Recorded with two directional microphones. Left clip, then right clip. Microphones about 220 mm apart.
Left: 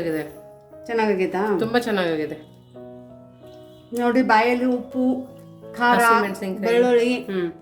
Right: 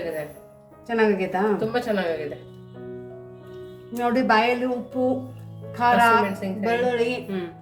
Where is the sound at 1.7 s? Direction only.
50° left (ahead or behind).